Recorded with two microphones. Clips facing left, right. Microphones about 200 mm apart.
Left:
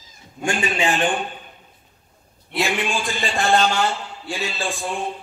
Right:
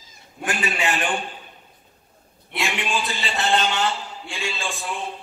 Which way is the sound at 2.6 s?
45° left (ahead or behind).